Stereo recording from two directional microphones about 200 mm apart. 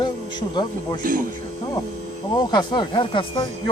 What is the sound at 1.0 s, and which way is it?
Speech, 45° right (ahead or behind).